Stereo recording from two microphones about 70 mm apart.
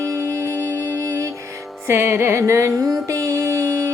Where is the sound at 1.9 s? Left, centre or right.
Right.